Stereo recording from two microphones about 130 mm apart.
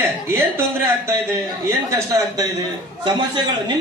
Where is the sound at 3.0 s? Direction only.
35° right (ahead or behind).